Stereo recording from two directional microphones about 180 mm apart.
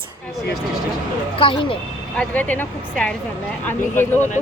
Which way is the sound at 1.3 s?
30° left (ahead or behind).